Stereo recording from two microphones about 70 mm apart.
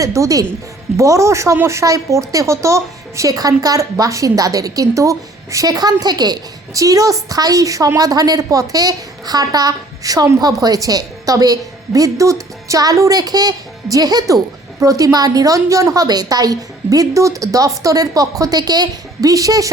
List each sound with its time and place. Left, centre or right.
0.0 s a woman's voice: right
14.8 s speech: right